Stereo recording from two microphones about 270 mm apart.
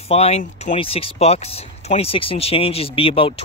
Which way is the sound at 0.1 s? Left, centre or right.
Left.